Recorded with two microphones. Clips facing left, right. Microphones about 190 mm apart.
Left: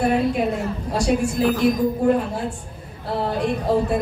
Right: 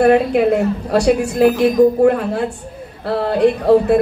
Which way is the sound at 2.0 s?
70° right (ahead or behind).